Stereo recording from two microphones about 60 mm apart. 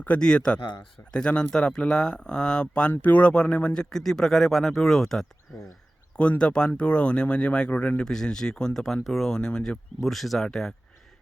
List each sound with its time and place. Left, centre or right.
0.2 s speech: centre
6.4 s speech: centre
8.0 s speech: centre
10.0 s speech: centre